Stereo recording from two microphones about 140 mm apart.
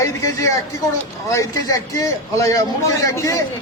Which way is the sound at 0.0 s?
25° left (ahead or behind).